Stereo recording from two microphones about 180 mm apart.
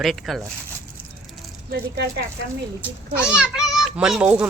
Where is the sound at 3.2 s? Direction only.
5° right (ahead or behind).